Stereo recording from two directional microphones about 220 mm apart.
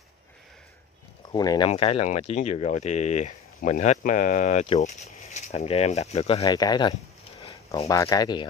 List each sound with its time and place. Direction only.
1.3 s speech: 20° left (ahead or behind)
7.4 s a sound: 25° left (ahead or behind)
7.9 s speech: 15° left (ahead or behind)